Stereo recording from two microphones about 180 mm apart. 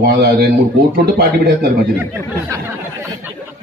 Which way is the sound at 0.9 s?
60° right (ahead or behind).